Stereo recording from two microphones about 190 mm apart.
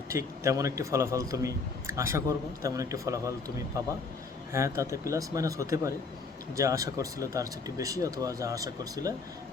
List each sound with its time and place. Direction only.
0.1 s a man's voice: 15° right (ahead or behind)
4.5 s a man's voice: 15° right (ahead or behind)